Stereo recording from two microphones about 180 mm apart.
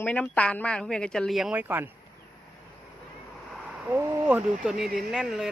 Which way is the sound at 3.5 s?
5° right (ahead or behind).